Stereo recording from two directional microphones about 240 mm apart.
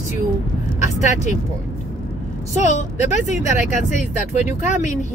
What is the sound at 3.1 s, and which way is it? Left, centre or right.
Speech, left.